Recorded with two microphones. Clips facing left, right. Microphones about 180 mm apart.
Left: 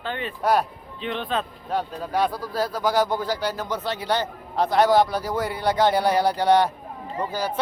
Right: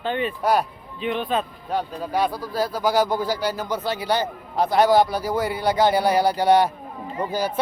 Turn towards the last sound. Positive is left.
turn(degrees=-10)  # may be behind; listen again after turning